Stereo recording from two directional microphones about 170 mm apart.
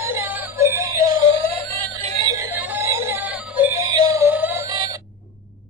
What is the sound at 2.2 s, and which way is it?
Synthetic singing, 15° right (ahead or behind).